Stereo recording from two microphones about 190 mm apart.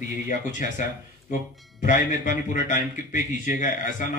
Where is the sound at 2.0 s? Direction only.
40° left (ahead or behind).